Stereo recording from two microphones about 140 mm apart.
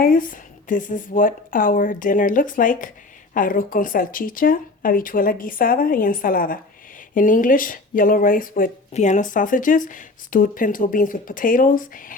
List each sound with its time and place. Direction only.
0.0 s speech: 85° left
7.1 s speech: 70° left (ahead or behind)
8.9 s speech: 55° left (ahead or behind); by 12.1 s 80° left